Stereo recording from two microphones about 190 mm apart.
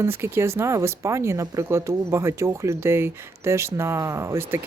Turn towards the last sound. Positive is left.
turn(degrees=-10)  # may be behind; listen again after turning